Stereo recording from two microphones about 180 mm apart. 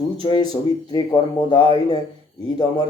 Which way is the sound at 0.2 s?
25° left (ahead or behind).